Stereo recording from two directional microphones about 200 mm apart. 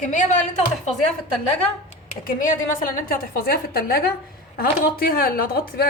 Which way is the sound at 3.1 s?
50° left (ahead or behind).